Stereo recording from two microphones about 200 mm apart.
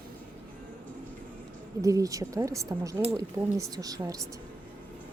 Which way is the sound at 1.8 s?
15° right (ahead or behind).